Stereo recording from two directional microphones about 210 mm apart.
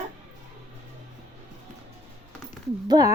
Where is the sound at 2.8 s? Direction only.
15° right (ahead or behind).